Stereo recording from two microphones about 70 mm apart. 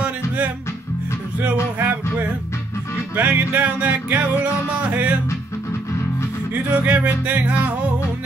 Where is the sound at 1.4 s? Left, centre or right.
Right.